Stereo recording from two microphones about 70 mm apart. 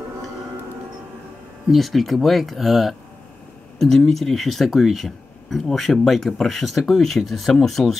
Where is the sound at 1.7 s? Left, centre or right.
Centre.